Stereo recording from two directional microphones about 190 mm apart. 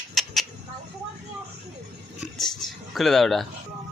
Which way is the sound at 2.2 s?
Centre (ahead or behind).